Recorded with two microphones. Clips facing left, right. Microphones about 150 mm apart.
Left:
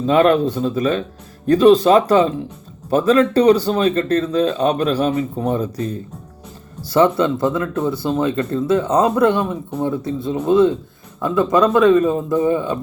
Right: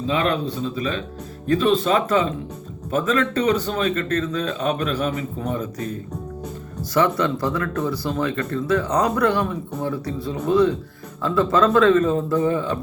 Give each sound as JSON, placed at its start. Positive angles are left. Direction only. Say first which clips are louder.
{"t": 0.1, "sound": "a man's voice", "louder": "left 9 dB", "side_deg": 45}